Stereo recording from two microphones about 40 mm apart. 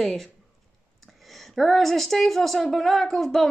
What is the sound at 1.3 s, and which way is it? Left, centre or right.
A woman's voice, centre.